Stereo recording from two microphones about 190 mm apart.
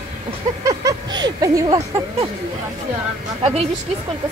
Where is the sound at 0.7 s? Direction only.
20° right (ahead or behind).